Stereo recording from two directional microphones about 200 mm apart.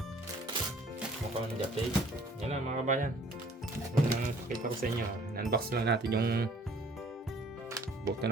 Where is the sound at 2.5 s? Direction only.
40° right (ahead or behind).